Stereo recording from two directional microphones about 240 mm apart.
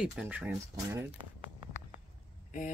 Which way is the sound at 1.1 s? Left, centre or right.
Right.